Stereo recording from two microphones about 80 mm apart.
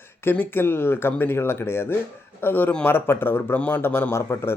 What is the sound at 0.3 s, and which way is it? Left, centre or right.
A man's voice, left.